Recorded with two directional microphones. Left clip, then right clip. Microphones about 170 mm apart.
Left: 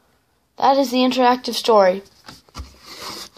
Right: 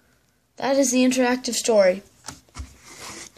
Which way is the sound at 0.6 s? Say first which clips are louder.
Left 4 dB; 5° right (ahead or behind).